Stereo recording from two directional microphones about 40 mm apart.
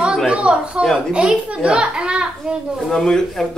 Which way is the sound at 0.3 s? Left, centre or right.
Right.